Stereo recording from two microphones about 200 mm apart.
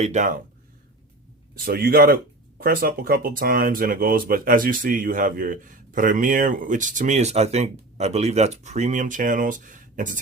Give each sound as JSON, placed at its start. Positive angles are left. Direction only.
{"t": 0.0, "sound": "speech", "side_deg": -35}
{"t": 1.6, "sound": "speech", "side_deg": -50}